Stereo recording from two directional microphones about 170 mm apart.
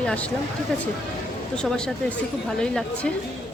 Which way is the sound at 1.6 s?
5° left (ahead or behind).